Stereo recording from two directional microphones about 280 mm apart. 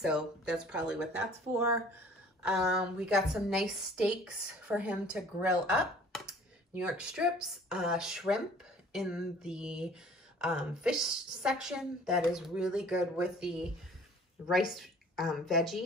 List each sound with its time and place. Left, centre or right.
0.0 s a woman's voice: centre
2.4 s a woman's voice: centre